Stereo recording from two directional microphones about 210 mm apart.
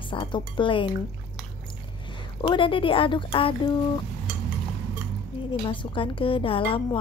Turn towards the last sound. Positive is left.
turn(degrees=25)  # may be behind; listen again after turning